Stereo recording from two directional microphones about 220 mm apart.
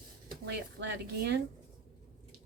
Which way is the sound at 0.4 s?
50° right (ahead or behind).